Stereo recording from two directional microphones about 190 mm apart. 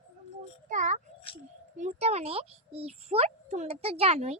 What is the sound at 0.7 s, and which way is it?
A child's voice, 40° right (ahead or behind).